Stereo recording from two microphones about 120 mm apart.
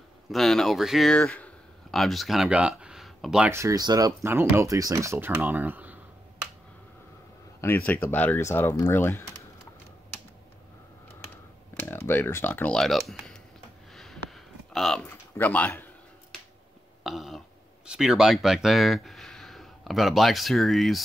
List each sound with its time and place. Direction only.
0.3 s speech: centre (ahead or behind)
1.1 s speech: 10° left (ahead or behind)
3.4 s speech: 25° right (ahead or behind)
4.3 s speech: 20° right (ahead or behind)
7.6 s speech: 15° left (ahead or behind)
11.8 s speech: 15° left (ahead or behind)
12.7 s speech: centre (ahead or behind)
13.9 s a sound: 5° left (ahead or behind)
15.0 s speech: 15° left (ahead or behind)
17.0 s throat clearing: centre (ahead or behind)
17.8 s speech: 5° right (ahead or behind)